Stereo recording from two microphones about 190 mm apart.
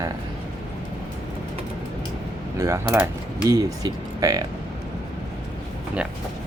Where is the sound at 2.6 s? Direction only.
15° right (ahead or behind).